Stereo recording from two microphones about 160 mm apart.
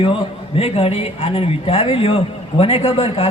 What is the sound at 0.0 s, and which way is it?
A man's voice, 35° left (ahead or behind).